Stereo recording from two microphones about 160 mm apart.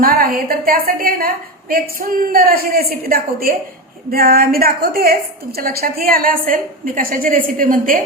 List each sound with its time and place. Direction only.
0.0 s a woman's voice: 65° right (ahead or behind)